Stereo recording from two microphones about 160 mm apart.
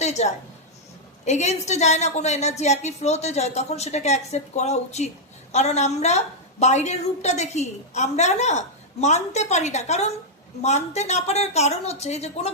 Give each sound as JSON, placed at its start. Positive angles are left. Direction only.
{"t": 0.0, "sound": "a woman's voice", "side_deg": 45}